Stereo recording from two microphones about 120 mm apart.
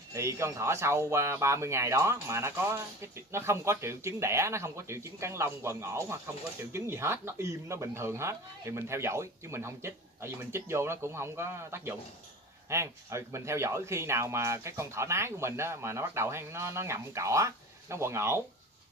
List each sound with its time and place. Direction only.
0.1 s speech: 25° right (ahead or behind)